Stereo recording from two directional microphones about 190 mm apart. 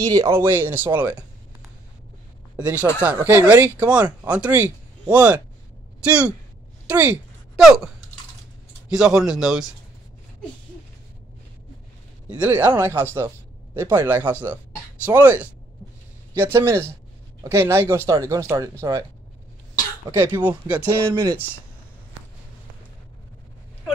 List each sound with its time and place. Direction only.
0.0 s speech: 15° right (ahead or behind)
2.5 s speech: 5° right (ahead or behind)
12.3 s speech: 10° right (ahead or behind)
20.4 s speech: 10° right (ahead or behind)
21.1 s speech: 20° right (ahead or behind)